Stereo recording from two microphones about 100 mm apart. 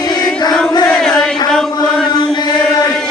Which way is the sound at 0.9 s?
10° left (ahead or behind).